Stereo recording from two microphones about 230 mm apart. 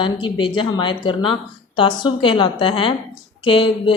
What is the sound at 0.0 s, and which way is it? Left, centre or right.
A woman's voice, left.